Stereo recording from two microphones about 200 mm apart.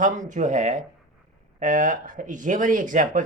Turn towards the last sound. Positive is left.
turn(degrees=-40)  # may be behind; listen again after turning